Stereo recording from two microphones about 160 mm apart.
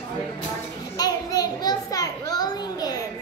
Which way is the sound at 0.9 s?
25° left (ahead or behind).